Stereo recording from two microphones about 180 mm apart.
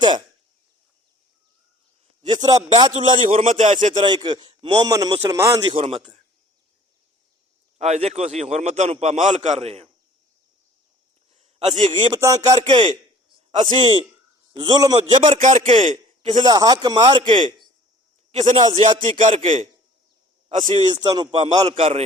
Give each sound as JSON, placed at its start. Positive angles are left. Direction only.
{"t": 2.2, "sound": "a man's voice", "side_deg": -25}
{"t": 4.0, "sound": "a man's voice", "side_deg": -25}
{"t": 7.8, "sound": "a man's voice", "side_deg": -35}
{"t": 11.3, "sound": "a man's voice", "side_deg": -35}
{"t": 12.9, "sound": "a sound", "side_deg": -25}
{"t": 14.5, "sound": "a man's voice", "side_deg": -25}
{"t": 15.4, "sound": "a man's voice", "side_deg": -45}
{"t": 16.4, "sound": "a man's voice", "side_deg": -20}
{"t": 18.3, "sound": "a man's voice", "side_deg": -35}
{"t": 18.6, "sound": "a man's voice", "side_deg": -25}
{"t": 19.2, "sound": "a man's voice", "side_deg": -40}
{"t": 20.6, "sound": "a man's voice", "side_deg": -25}